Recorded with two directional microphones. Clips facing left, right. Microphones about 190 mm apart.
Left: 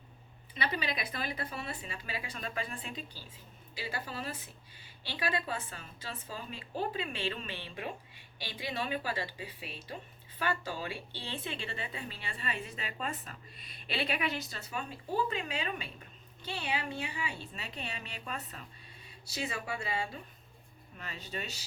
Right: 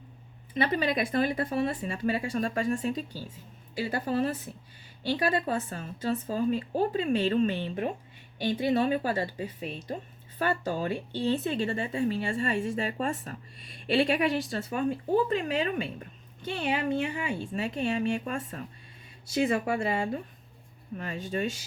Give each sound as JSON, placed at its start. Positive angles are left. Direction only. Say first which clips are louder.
{"t": 0.5, "sound": "a woman's voice", "louder": "right 9 dB", "side_deg": -50}
{"t": 14.6, "sound": "a woman's voice", "louder": "right 12 dB", "side_deg": -50}